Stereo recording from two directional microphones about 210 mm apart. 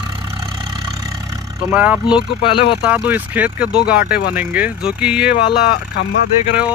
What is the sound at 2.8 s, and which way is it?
Speech, 5° right (ahead or behind).